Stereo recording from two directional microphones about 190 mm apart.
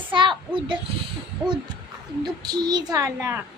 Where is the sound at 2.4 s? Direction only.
20° right (ahead or behind).